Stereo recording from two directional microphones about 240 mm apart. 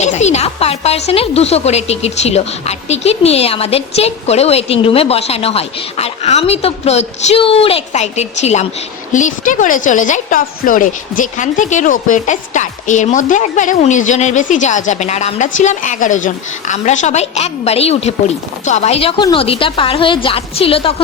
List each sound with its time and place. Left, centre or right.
0.0 s a woman's voice: left